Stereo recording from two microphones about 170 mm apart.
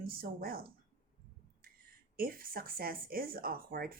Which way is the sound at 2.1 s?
60° right (ahead or behind).